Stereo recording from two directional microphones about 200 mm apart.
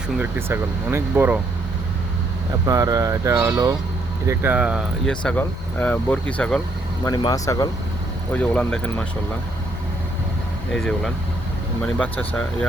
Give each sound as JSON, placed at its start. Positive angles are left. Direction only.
{"t": 0.2, "sound": "speech", "side_deg": -10}
{"t": 2.6, "sound": "speech", "side_deg": -15}
{"t": 7.0, "sound": "speech", "side_deg": 20}
{"t": 8.3, "sound": "speech", "side_deg": 5}
{"t": 10.7, "sound": "speech", "side_deg": 5}